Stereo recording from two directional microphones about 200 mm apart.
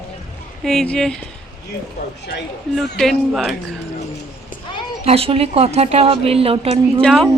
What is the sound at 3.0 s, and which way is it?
Speech, centre (ahead or behind).